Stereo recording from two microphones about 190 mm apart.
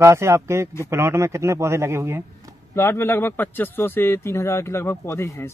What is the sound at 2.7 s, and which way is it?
A man's voice, 15° left (ahead or behind).